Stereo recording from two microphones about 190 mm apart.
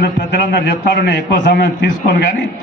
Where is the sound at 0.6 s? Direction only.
50° left (ahead or behind).